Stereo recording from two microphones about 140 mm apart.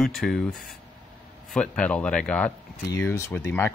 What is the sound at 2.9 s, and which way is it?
Speech, 20° left (ahead or behind).